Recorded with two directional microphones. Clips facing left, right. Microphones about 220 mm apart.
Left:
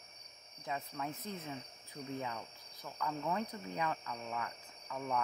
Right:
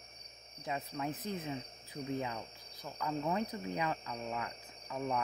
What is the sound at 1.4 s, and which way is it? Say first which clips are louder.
Speech: right 4 dB; 15° right (ahead or behind).